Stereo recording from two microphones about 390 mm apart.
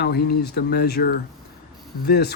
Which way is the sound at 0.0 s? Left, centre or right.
Left.